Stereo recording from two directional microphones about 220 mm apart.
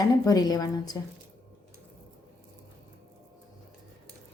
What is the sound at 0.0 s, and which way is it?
A woman's voice, 15° left (ahead or behind).